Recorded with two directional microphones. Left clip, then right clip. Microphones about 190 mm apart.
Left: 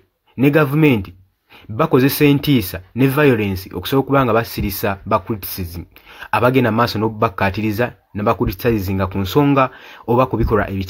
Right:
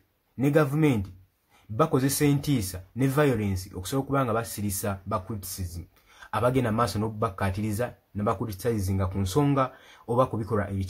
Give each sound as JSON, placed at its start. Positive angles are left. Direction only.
{"t": 0.4, "sound": "speech", "side_deg": 25}